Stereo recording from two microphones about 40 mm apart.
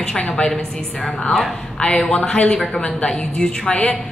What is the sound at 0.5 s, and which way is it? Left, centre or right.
Speech, centre.